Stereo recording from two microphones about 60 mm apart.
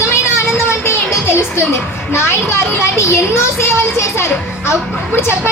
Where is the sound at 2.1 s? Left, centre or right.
Left.